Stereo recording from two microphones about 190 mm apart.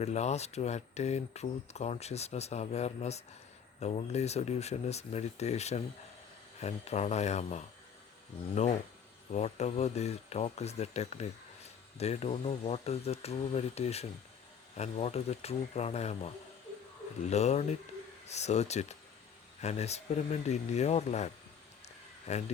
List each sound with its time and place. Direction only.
0.0 s speech: 35° left (ahead or behind)
9.3 s speech: 35° left (ahead or behind)
22.3 s speech: 35° left (ahead or behind)